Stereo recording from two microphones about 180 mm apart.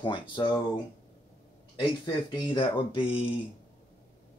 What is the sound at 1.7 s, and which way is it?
Speech, 30° left (ahead or behind).